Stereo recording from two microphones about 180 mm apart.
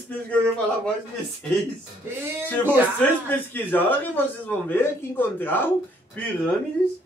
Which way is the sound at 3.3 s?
10° left (ahead or behind).